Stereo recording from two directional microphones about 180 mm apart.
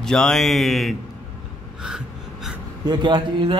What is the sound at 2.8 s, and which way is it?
Speech, 25° right (ahead or behind).